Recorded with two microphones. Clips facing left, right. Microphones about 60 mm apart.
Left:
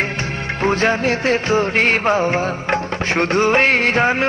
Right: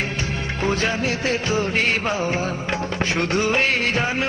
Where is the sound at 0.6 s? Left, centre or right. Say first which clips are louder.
Left 6 dB; left.